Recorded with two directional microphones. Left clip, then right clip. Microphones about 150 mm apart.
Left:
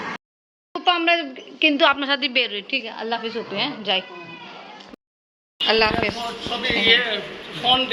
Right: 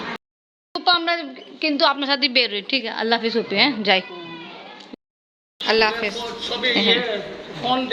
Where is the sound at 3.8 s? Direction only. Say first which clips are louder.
Right 4 dB; 45° right (ahead or behind).